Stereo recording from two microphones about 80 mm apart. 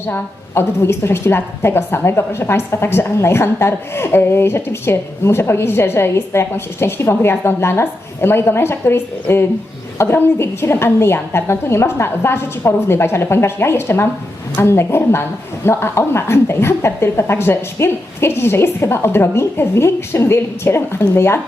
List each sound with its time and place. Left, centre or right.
0.1 s a woman's voice: left